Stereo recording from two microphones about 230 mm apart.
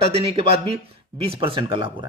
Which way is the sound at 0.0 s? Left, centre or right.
Right.